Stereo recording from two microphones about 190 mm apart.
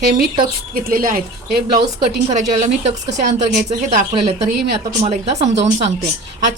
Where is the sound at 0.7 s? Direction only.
50° right (ahead or behind).